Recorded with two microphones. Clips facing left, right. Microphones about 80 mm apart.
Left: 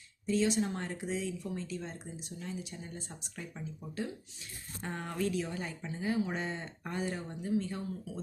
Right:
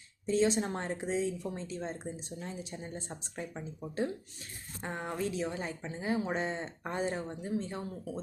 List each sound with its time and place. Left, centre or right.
0.3 s speech: right
4.8 s speech: right